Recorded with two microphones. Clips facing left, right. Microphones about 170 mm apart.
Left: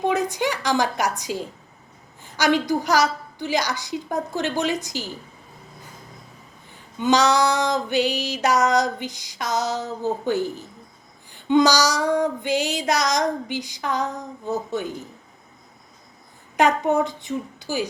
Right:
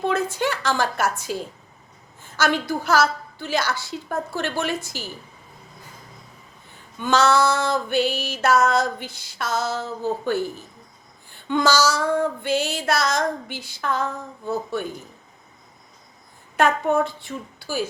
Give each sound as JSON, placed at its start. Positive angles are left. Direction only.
{"t": 0.0, "sound": "female singing", "side_deg": 15}
{"t": 7.0, "sound": "female singing", "side_deg": 15}
{"t": 16.6, "sound": "female singing", "side_deg": 15}